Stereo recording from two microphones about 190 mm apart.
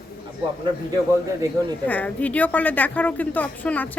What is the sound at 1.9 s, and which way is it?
A woman's voice, 10° left (ahead or behind).